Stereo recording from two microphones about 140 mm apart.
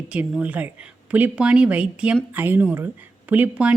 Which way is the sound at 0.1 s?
10° right (ahead or behind).